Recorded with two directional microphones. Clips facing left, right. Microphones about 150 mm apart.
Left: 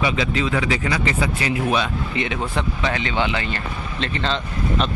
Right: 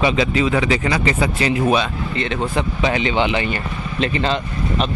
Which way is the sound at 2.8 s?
20° right (ahead or behind).